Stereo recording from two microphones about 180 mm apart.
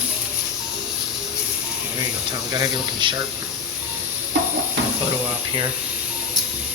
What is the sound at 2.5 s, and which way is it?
Speech, 25° right (ahead or behind).